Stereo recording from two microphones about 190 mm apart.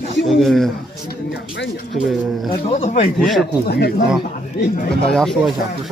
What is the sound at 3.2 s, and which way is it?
Speech, centre (ahead or behind).